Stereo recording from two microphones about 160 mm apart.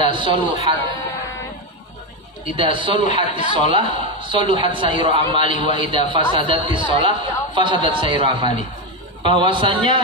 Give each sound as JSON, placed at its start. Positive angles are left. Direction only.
{"t": 0.0, "sound": "a man's voice", "side_deg": -30}
{"t": 2.5, "sound": "a man's voice", "side_deg": -30}